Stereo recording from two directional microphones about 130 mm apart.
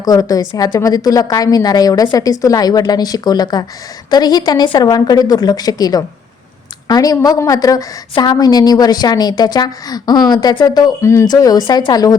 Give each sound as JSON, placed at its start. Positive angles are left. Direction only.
{"t": 0.0, "sound": "a woman's voice", "side_deg": 30}